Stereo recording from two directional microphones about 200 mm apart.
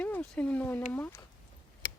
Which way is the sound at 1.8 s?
55° left (ahead or behind).